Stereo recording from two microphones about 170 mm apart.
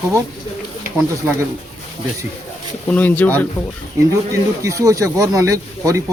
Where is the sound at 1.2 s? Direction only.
15° right (ahead or behind).